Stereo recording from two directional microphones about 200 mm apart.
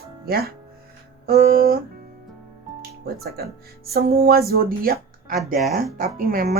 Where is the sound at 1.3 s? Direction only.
50° right (ahead or behind).